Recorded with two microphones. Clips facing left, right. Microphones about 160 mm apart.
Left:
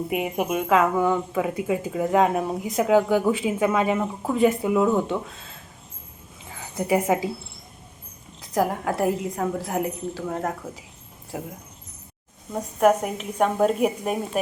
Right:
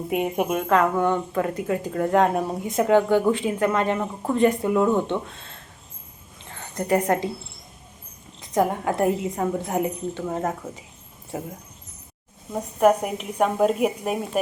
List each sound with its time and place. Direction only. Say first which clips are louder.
0.1 s speech: right 4 dB; 5° left (ahead or behind)
6.4 s a sound: left 1 dB; 5° left (ahead or behind)
8.4 s speech: right 1 dB; centre (ahead or behind)
12.5 s a woman's voice: right 1 dB; 10° right (ahead or behind)